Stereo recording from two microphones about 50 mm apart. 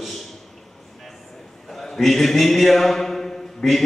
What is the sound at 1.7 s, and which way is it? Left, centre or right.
A man's voice, centre.